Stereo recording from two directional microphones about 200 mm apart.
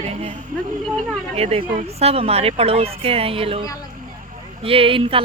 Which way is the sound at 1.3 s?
30° right (ahead or behind).